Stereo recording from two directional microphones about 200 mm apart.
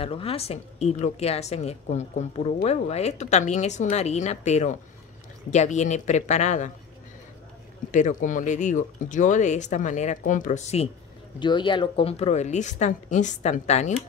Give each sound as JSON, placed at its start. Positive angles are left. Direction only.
{"t": 0.0, "sound": "a woman's voice", "side_deg": 30}
{"t": 7.9, "sound": "a woman's voice", "side_deg": 40}
{"t": 11.3, "sound": "a woman's voice", "side_deg": 25}